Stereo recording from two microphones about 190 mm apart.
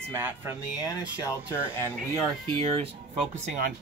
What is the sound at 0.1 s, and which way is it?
Speech, 15° right (ahead or behind).